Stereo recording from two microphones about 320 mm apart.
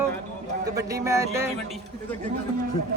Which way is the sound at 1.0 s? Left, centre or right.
Centre.